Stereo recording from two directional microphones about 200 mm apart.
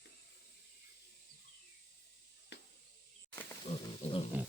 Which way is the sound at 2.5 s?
60° left (ahead or behind).